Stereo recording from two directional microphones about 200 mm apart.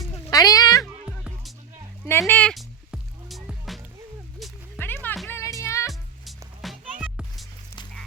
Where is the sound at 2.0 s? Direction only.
10° left (ahead or behind).